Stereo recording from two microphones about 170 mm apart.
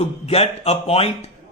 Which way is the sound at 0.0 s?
35° left (ahead or behind).